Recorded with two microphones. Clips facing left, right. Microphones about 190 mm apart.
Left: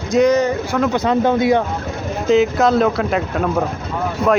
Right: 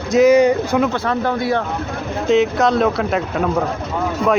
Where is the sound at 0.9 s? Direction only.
20° left (ahead or behind).